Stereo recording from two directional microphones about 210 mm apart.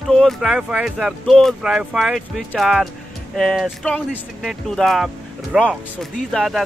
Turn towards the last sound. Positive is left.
turn(degrees=0)  # may be behind; listen again after turning